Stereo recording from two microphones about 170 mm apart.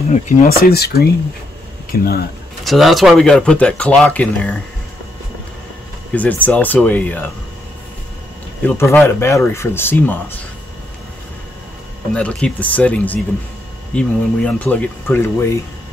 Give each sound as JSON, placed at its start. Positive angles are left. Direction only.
{"t": 0.1, "sound": "speech", "side_deg": 55}
{"t": 2.6, "sound": "speech", "side_deg": 0}
{"t": 6.1, "sound": "speech", "side_deg": 10}
{"t": 8.6, "sound": "speech", "side_deg": 15}
{"t": 12.1, "sound": "speech", "side_deg": 5}